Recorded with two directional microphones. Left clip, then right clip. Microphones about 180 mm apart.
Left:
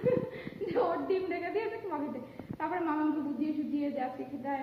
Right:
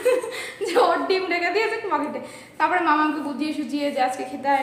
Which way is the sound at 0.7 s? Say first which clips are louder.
Right 11 dB; 10° right (ahead or behind).